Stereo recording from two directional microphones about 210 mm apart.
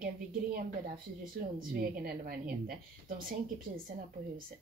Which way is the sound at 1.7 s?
45° right (ahead or behind).